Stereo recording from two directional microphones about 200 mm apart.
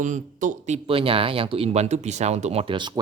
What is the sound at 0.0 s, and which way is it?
Speech, 40° right (ahead or behind).